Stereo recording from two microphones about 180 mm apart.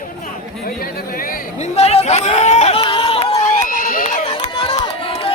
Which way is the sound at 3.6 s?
50° left (ahead or behind).